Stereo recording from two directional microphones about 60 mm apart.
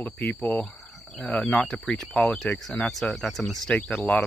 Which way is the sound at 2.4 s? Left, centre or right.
Left.